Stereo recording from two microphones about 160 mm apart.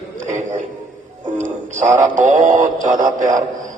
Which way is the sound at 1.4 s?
50° right (ahead or behind).